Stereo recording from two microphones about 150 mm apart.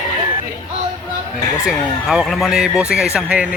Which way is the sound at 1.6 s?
5° right (ahead or behind).